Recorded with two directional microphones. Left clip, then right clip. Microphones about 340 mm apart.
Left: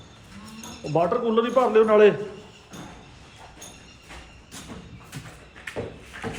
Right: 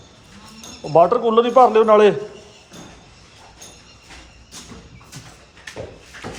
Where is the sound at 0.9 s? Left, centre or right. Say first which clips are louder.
Right 8 dB; centre.